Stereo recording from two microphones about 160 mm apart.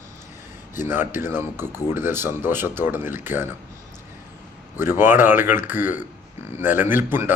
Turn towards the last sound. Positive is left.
turn(degrees=-15)  # may be behind; listen again after turning